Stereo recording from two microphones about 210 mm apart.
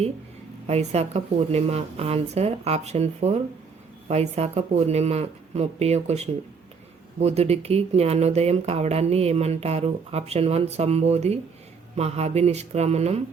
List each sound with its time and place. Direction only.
0.7 s a woman's voice: 30° right (ahead or behind)